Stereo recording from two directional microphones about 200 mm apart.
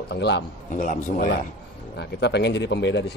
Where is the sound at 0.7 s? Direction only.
40° left (ahead or behind).